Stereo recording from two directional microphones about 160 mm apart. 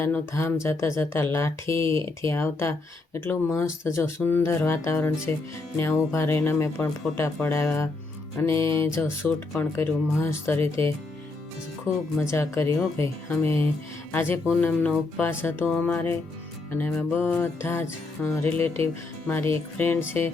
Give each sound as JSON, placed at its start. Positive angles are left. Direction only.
{"t": 0.0, "sound": "speech", "side_deg": 15}
{"t": 12.3, "sound": "speech", "side_deg": 15}